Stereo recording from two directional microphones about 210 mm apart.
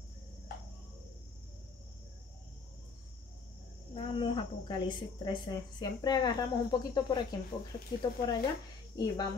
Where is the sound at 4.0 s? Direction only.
25° left (ahead or behind).